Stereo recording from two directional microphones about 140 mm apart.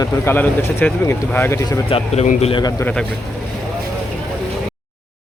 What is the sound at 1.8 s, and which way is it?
Speech, 45° left (ahead or behind).